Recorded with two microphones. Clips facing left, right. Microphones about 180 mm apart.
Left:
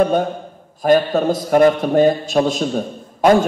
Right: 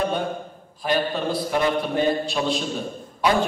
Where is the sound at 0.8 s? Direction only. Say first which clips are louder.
Left 9 dB; 45° left (ahead or behind).